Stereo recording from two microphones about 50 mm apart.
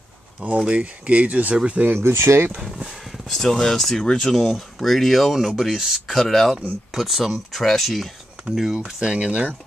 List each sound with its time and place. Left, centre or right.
0.7 s speech: right
2.0 s speech: right
2.6 s speech: centre
4.4 s speech: centre
8.7 s speech: centre